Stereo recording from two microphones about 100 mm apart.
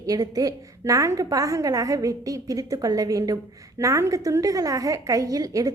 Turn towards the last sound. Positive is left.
turn(degrees=-35)  # may be behind; listen again after turning